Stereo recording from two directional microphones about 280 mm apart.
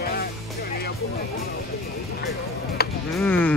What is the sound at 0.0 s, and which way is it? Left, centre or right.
Music, left.